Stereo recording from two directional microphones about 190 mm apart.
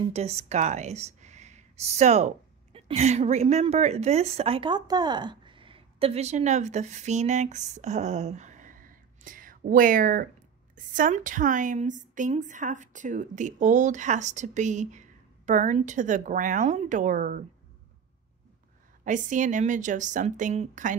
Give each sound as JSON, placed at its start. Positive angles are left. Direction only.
{"t": 0.0, "sound": "a woman's voice", "side_deg": -35}
{"t": 19.0, "sound": "a woman's voice", "side_deg": -40}